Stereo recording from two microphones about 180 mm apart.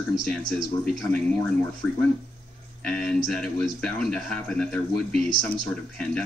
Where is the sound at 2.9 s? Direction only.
Centre (ahead or behind).